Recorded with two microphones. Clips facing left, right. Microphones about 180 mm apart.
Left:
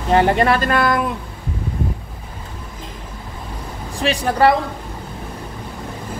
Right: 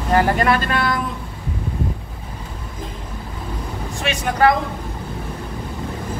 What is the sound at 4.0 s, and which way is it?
Speech, 35° left (ahead or behind).